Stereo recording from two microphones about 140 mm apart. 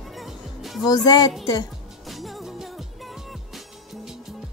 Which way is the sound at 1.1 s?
30° left (ahead or behind).